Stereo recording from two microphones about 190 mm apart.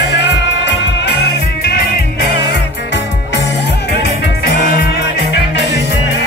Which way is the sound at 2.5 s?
65° left (ahead or behind).